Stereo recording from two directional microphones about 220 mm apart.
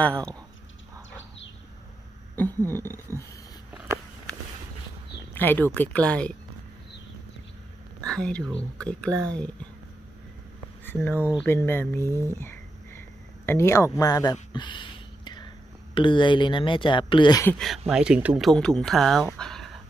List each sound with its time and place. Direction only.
2.3 s speech: 10° left (ahead or behind)
3.7 s walk: 5° right (ahead or behind)
5.3 s speech: 10° left (ahead or behind)
8.0 s speech: 5° left (ahead or behind)
10.9 s speech: 10° left (ahead or behind)
11.1 s speech: 10° right (ahead or behind)
11.4 s speech: 10° left (ahead or behind)
12.3 s a sound: 10° left (ahead or behind)
13.5 s speech: 10° left (ahead or behind)
17.6 s speech: centre (ahead or behind)
19.2 s a sound: 5° left (ahead or behind)